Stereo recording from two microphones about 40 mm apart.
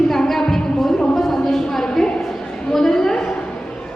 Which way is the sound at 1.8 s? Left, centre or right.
Centre.